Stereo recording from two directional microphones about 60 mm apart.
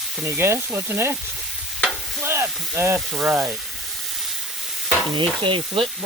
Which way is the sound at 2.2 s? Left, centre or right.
Right.